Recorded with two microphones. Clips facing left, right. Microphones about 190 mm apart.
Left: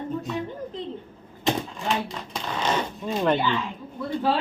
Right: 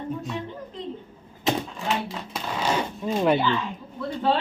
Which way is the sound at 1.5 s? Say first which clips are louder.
Even; 5° right (ahead or behind).